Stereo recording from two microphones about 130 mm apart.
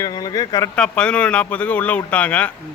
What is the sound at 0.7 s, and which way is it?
Speech, 5° left (ahead or behind).